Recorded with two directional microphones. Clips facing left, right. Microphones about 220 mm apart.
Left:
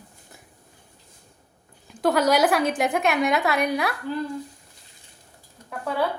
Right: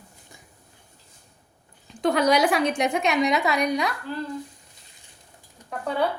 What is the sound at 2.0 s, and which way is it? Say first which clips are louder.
A woman's voice: left 1 dB; centre (ahead or behind).